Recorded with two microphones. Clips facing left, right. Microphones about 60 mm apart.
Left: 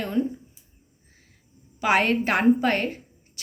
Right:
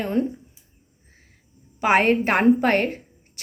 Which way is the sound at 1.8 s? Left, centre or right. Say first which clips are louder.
Right 3 dB; right.